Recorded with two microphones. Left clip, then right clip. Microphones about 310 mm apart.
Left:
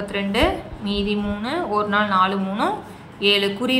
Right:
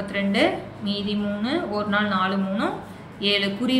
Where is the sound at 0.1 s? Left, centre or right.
Centre.